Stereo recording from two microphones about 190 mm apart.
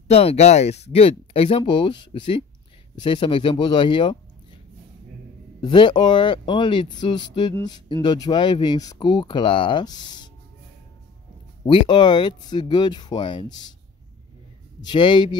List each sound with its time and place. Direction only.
0.1 s speech: 30° left (ahead or behind)
5.6 s speech: 25° left (ahead or behind)
11.6 s speech: 25° left (ahead or behind)
14.8 s speech: 25° left (ahead or behind)